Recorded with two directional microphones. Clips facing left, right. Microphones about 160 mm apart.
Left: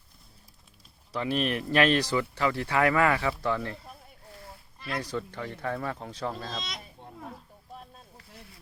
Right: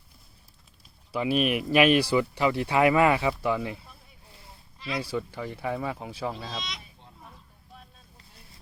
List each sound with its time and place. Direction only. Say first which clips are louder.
1.1 s speech: right 3 dB; 10° right (ahead or behind)
4.9 s speech: right 2 dB; 5° right (ahead or behind)
6.7 s a sound: left 1 dB; 45° left (ahead or behind)